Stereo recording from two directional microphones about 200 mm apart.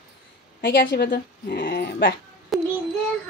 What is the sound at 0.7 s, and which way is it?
Speech, 60° left (ahead or behind).